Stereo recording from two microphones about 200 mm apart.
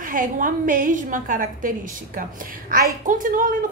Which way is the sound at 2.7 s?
45° right (ahead or behind).